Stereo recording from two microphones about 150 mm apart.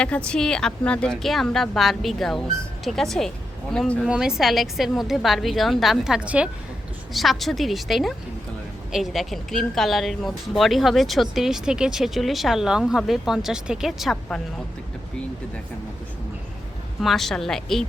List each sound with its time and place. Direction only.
0.3 s speech: 5° left (ahead or behind)
17.0 s speech: centre (ahead or behind)